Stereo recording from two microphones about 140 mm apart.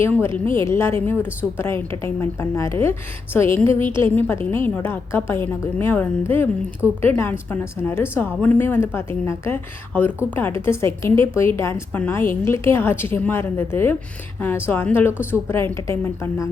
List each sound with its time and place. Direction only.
0.0 s a woman's voice: 15° left (ahead or behind)